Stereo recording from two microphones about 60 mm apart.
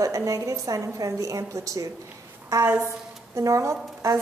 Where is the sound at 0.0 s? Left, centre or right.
Right.